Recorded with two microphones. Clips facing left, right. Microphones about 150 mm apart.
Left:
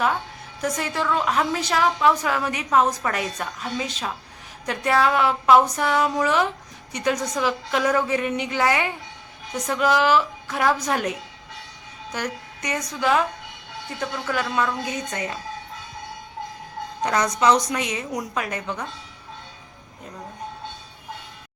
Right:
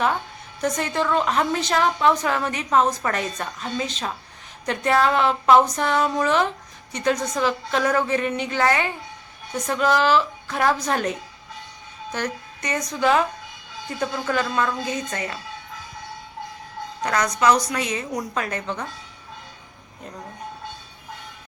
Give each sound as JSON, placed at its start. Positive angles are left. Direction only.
{"t": 0.6, "sound": "a woman's voice", "side_deg": 5}
{"t": 12.1, "sound": "music", "side_deg": 10}
{"t": 13.0, "sound": "a woman's voice", "side_deg": 0}
{"t": 14.3, "sound": "a woman's voice", "side_deg": 10}
{"t": 17.0, "sound": "a woman's voice", "side_deg": 20}